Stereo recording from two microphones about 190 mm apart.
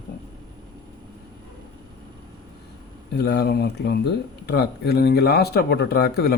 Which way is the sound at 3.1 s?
60° left (ahead or behind).